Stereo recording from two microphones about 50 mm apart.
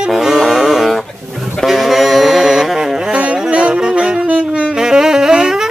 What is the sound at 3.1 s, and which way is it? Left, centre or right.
Music, right.